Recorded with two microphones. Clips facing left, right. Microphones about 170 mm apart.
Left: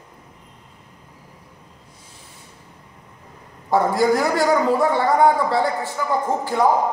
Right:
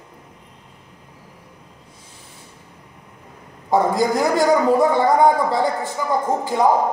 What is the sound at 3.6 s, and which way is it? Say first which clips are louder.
A man's voice: even; 15° right (ahead or behind).